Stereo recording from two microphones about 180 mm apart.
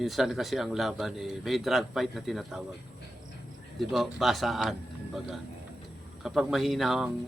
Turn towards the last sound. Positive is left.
turn(degrees=0)  # may be behind; listen again after turning